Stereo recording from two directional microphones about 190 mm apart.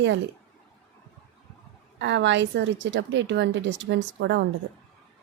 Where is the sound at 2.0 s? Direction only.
70° right (ahead or behind).